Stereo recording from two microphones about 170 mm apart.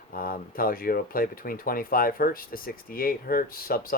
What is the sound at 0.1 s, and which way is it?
Speech, 55° left (ahead or behind).